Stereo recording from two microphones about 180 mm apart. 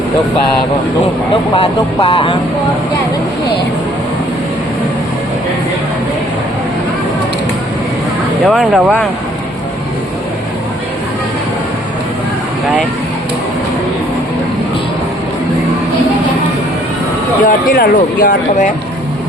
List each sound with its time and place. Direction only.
2.0 s speech: 30° left (ahead or behind)
8.4 s speech: 5° right (ahead or behind)
17.4 s speech: 55° left (ahead or behind)